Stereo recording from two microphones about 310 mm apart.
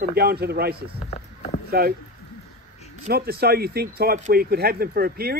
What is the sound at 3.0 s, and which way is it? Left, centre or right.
Speech, right.